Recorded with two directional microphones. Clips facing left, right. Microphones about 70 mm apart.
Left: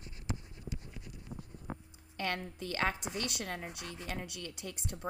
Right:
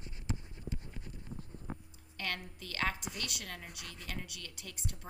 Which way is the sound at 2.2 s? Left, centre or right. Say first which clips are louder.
Left 4 dB; left.